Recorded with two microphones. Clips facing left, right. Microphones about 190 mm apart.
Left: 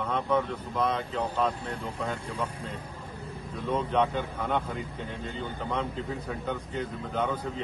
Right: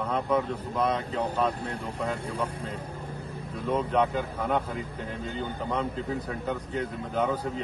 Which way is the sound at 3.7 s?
5° right (ahead or behind).